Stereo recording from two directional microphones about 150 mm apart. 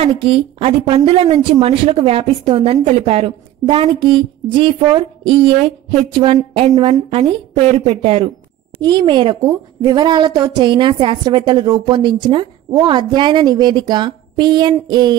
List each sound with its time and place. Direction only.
0.0 s a woman's voice: 40° right (ahead or behind)